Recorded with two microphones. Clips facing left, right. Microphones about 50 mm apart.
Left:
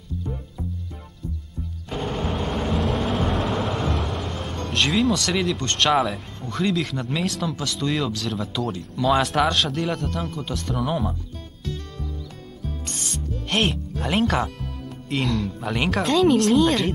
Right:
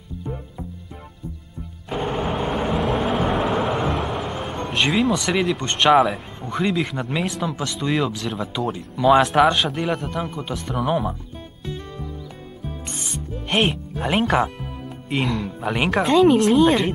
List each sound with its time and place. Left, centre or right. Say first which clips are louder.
0.2 s music: right 4 dB; centre
1.9 s a sound: right 3 dB; centre
6.5 s speech: right 2 dB; centre
11.6 s music: right 1 dB; centre
12.6 s speech: even; centre